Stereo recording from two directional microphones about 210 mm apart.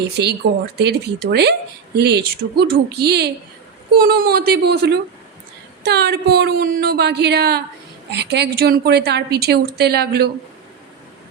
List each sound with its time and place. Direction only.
0.1 s a woman's voice: 50° right (ahead or behind)